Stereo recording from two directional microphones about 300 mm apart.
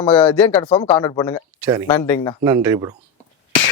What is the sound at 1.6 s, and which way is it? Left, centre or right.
Speech, centre.